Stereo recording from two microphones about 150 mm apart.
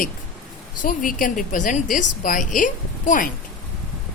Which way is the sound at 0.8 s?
65° left (ahead or behind).